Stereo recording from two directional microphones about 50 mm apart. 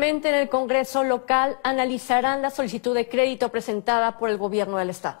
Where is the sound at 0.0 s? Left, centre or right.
Right.